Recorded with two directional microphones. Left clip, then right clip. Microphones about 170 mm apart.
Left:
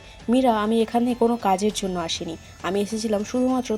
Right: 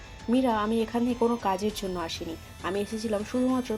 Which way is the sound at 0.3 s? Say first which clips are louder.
Left 6 dB; 30° left (ahead or behind).